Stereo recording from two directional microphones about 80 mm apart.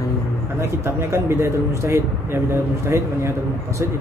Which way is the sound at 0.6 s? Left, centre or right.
Right.